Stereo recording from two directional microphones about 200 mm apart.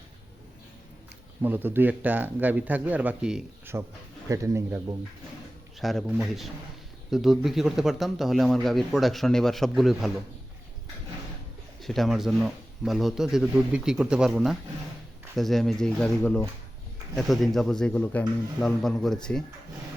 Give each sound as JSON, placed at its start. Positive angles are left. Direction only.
{"t": 1.4, "sound": "speech", "side_deg": -10}
{"t": 5.8, "sound": "speech", "side_deg": 0}
{"t": 11.8, "sound": "speech", "side_deg": 0}